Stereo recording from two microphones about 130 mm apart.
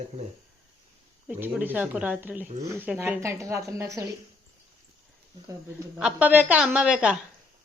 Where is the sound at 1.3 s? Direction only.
15° right (ahead or behind).